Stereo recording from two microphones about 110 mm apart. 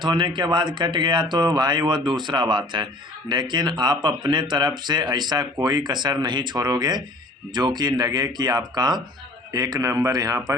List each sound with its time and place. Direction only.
0.0 s speech: 45° right (ahead or behind)